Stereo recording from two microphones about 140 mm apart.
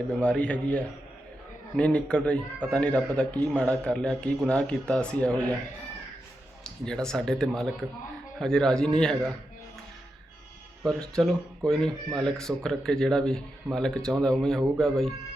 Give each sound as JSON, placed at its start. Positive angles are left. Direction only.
{"t": 0.2, "sound": "a man's voice", "side_deg": 10}
{"t": 6.7, "sound": "speech", "side_deg": 5}
{"t": 10.8, "sound": "speech", "side_deg": 5}